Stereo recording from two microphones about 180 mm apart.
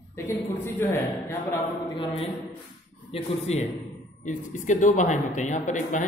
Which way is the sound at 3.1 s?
40° left (ahead or behind).